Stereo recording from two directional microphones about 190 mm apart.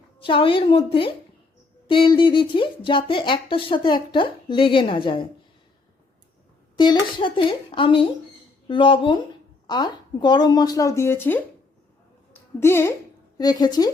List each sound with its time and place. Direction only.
0.2 s speech: 25° left (ahead or behind)
6.7 s speech: 25° left (ahead or behind)
12.5 s a woman's voice: 15° left (ahead or behind)